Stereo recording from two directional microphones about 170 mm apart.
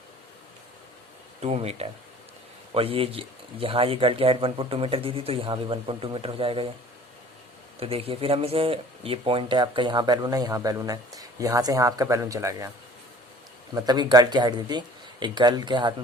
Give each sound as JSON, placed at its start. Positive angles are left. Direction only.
{"t": 1.4, "sound": "speech", "side_deg": -40}
{"t": 7.8, "sound": "speech", "side_deg": -35}
{"t": 13.7, "sound": "speech", "side_deg": -25}